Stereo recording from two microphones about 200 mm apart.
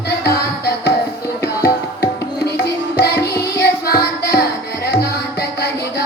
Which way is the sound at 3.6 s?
50° left (ahead or behind).